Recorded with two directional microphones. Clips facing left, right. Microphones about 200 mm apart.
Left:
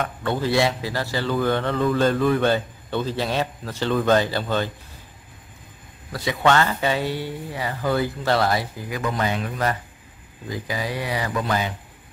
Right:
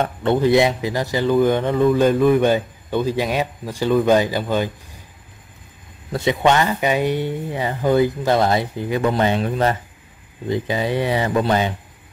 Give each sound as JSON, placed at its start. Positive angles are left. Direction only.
{"t": 0.0, "sound": "speech", "side_deg": -25}
{"t": 6.1, "sound": "speech", "side_deg": -20}